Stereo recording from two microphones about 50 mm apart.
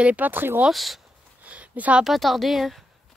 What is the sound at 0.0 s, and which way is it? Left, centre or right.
Speech, right.